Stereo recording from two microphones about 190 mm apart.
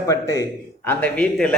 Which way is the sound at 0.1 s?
15° left (ahead or behind).